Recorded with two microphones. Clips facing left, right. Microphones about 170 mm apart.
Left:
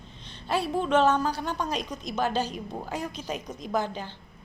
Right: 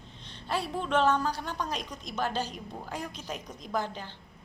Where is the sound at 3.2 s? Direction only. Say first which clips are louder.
Left 5 dB; 20° left (ahead or behind).